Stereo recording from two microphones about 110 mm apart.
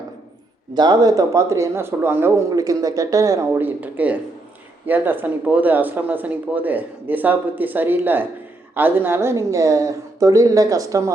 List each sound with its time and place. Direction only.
0.7 s speech: 40° right (ahead or behind)
3.6 s speech: 15° right (ahead or behind)